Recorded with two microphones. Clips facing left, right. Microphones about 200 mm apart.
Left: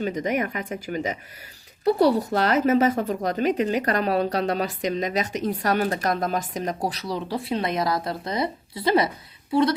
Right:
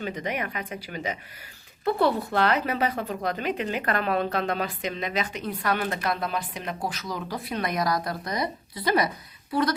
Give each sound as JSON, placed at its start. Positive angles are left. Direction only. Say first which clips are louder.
{"t": 0.0, "sound": "speech", "louder": "left 6 dB", "side_deg": 40}